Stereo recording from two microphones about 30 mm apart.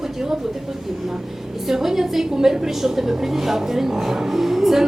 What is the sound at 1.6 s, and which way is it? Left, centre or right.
Speech, centre.